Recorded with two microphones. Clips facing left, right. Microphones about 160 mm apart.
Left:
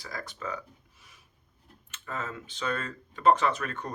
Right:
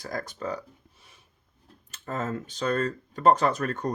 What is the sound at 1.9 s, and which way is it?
Speech, 40° right (ahead or behind).